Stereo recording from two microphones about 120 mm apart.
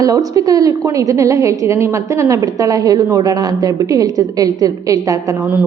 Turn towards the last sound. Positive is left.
turn(degrees=-30)  # may be behind; listen again after turning